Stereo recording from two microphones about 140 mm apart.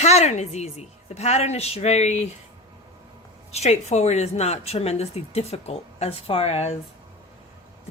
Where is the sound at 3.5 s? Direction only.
50° left (ahead or behind).